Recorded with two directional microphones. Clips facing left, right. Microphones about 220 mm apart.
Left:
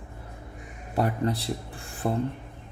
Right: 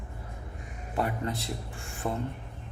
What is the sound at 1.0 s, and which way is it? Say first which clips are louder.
Speech: left 5 dB; 35° left (ahead or behind).